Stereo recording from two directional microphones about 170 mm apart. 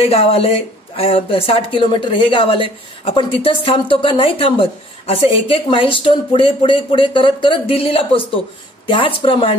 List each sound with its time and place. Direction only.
0.1 s speech: 35° left (ahead or behind)